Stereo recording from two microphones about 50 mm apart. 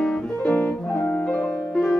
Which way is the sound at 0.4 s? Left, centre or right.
Left.